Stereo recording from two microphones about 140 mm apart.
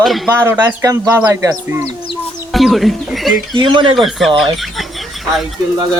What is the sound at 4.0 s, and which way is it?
Speech, centre (ahead or behind).